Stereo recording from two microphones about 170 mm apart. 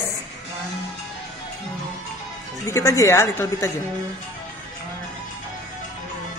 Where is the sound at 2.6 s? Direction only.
20° left (ahead or behind).